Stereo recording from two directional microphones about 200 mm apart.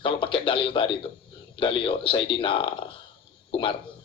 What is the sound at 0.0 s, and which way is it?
A man's voice, 25° left (ahead or behind).